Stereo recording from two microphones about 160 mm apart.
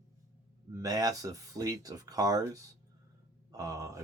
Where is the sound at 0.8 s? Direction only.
25° right (ahead or behind).